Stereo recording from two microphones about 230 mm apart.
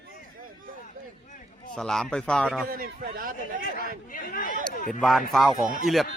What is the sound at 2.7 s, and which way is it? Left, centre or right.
Speech, right.